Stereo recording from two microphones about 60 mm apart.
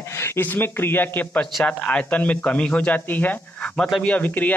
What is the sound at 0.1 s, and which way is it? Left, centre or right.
A man's voice, left.